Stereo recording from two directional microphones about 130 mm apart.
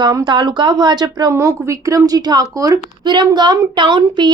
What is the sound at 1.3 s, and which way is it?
Speech, 20° right (ahead or behind).